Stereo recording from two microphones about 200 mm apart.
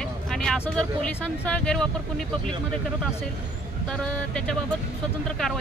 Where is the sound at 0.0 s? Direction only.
5° left (ahead or behind).